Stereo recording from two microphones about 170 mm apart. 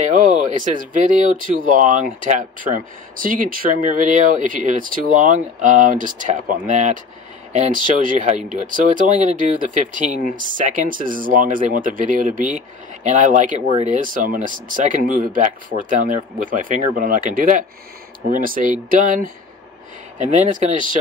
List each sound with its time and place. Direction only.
0.0 s speech: 50° right (ahead or behind)